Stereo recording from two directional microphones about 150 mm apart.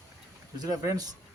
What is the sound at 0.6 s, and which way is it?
Speech, 25° right (ahead or behind).